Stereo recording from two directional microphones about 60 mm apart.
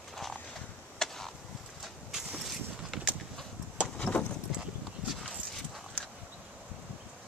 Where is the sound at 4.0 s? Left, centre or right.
Left.